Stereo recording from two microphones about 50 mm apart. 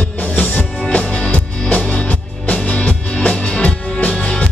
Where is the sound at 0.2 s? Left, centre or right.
Left.